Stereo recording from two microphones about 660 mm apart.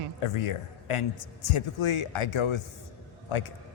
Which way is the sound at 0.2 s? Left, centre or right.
Left.